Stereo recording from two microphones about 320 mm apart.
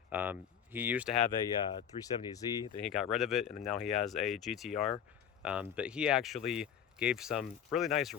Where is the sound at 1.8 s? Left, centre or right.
Centre.